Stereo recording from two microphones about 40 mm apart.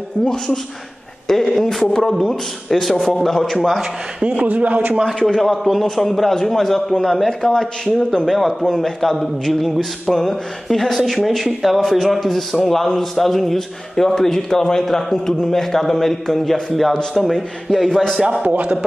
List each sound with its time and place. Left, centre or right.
0.2 s a woman's voice: left
1.2 s speech: centre
4.2 s a man's voice: right
5.4 s speech: centre
18.4 s a man's voice: right